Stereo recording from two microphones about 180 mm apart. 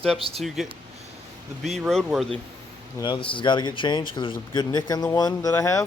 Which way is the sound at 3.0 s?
25° left (ahead or behind).